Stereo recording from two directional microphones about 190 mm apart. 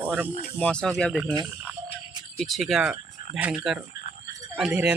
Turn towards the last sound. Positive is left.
turn(degrees=-5)  # may be behind; listen again after turning